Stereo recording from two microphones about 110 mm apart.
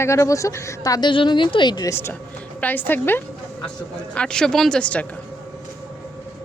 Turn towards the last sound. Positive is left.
turn(degrees=10)  # may be behind; listen again after turning